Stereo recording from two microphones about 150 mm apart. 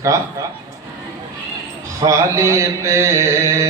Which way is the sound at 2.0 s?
20° right (ahead or behind).